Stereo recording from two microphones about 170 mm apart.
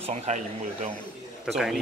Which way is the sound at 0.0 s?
40° right (ahead or behind).